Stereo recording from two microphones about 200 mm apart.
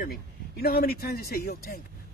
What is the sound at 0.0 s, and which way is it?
Speech, 50° left (ahead or behind).